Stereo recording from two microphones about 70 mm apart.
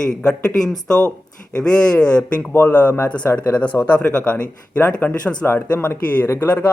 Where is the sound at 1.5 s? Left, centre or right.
Centre.